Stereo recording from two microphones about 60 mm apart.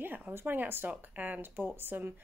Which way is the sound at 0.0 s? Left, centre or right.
Right.